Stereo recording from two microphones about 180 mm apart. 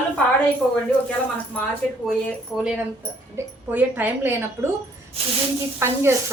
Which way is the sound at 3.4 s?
15° right (ahead or behind).